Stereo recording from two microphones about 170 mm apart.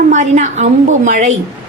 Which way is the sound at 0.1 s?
45° right (ahead or behind).